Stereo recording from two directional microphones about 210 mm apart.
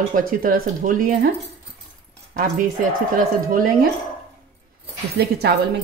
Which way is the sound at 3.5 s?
40° right (ahead or behind).